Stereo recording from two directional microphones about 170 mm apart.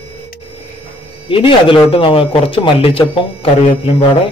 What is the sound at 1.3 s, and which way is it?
A man's voice, 30° left (ahead or behind).